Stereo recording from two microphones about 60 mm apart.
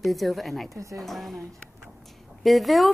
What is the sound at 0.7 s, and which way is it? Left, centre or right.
Speech, right.